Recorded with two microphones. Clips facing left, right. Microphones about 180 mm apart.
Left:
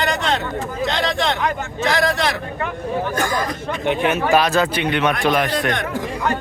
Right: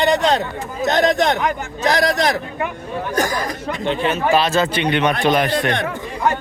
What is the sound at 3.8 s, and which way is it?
Speech, 15° left (ahead or behind).